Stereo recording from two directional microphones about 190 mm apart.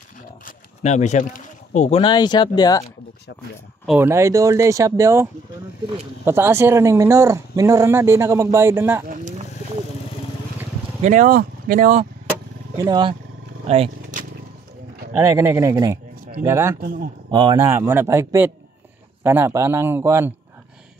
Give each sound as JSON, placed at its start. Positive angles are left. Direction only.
{"t": 0.5, "sound": "speech", "side_deg": 40}
{"t": 3.8, "sound": "speech", "side_deg": -10}
{"t": 11.0, "sound": "speech", "side_deg": -40}
{"t": 12.7, "sound": "speech", "side_deg": -20}
{"t": 13.7, "sound": "vehicle", "side_deg": -35}
{"t": 15.1, "sound": "speech", "side_deg": -15}